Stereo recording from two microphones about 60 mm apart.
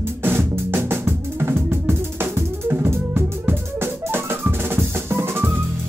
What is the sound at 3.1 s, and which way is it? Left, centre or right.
Drum, right.